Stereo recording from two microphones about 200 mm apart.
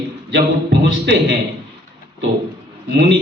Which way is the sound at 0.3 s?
60° right (ahead or behind).